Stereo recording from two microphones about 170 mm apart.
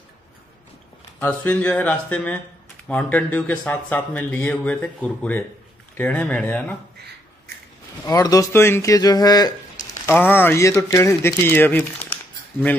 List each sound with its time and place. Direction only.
1.2 s speech: 10° left (ahead or behind)
8.1 s speech: 20° left (ahead or behind)
10.0 s speech: 10° left (ahead or behind)